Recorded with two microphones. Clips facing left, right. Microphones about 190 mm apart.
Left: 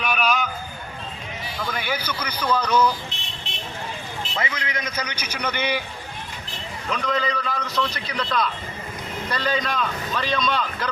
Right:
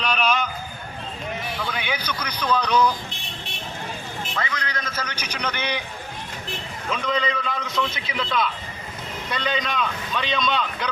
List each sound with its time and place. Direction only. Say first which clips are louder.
0.0 s a sound: even; 5° left (ahead or behind)
1.7 s a man's voice: left 1 dB; 5° left (ahead or behind)
4.4 s a man's voice: left 1 dB; 20° left (ahead or behind)
6.9 s a man's voice: even; centre (ahead or behind)